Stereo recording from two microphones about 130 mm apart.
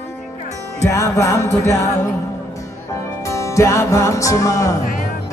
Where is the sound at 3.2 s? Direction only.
20° left (ahead or behind).